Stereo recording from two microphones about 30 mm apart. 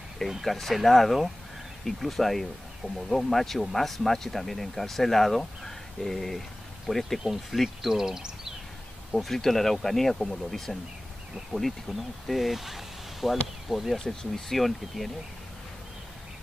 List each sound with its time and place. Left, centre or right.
0.4 s speech: centre
7.9 s speech: centre
9.1 s speech: centre
11.5 s speech: right
11.9 s speech: centre